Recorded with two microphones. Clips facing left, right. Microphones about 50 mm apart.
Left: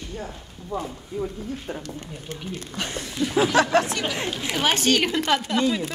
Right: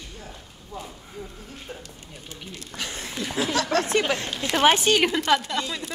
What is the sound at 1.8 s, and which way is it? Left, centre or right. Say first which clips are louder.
Speech: left 7 dB; left.